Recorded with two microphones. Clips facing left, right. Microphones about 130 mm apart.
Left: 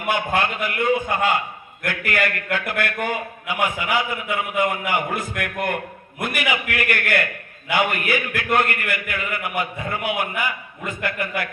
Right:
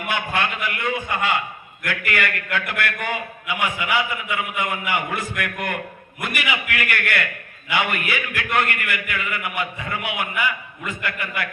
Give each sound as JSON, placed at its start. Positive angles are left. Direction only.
{"t": 0.1, "sound": "a man's voice", "side_deg": 40}